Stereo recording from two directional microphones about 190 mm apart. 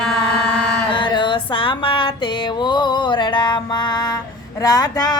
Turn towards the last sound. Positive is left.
turn(degrees=20)  # may be behind; listen again after turning